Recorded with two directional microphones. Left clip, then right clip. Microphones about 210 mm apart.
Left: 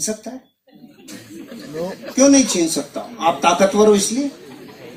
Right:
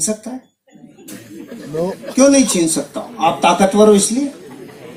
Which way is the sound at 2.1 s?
55° right (ahead or behind).